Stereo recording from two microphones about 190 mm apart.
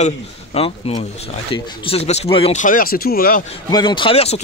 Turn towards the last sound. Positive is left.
turn(degrees=30)  # may be behind; listen again after turning